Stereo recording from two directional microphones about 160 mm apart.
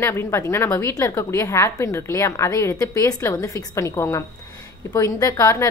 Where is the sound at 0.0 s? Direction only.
15° left (ahead or behind).